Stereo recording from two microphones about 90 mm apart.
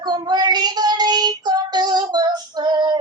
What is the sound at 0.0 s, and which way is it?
Child singing, 50° right (ahead or behind).